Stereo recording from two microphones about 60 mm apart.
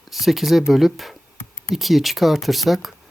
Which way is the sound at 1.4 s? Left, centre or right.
Left.